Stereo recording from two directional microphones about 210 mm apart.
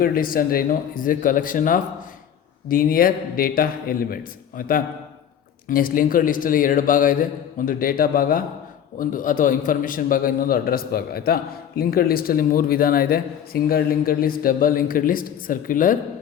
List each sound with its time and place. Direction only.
0.0 s speech: 45° left (ahead or behind)